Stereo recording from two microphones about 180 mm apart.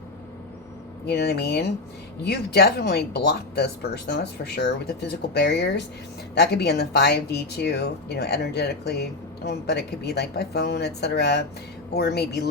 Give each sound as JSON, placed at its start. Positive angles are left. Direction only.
{"t": 1.0, "sound": "speech", "side_deg": 65}